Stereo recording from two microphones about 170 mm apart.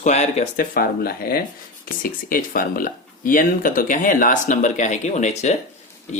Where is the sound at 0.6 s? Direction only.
60° left (ahead or behind); by 5.5 s 40° left (ahead or behind).